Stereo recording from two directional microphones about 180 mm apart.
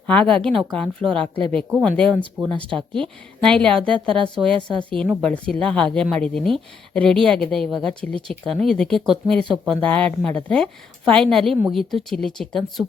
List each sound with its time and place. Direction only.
0.1 s speech: 5° left (ahead or behind)
1.0 s speech: 30° right (ahead or behind)
1.8 s speech: 5° left (ahead or behind)
4.0 s speech: 30° right (ahead or behind)
4.9 s speech: 5° left (ahead or behind)